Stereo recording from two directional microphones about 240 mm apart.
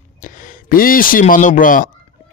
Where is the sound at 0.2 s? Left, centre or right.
Left.